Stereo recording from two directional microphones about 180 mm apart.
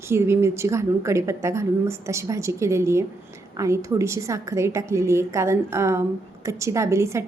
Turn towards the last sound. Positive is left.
turn(degrees=-15)  # may be behind; listen again after turning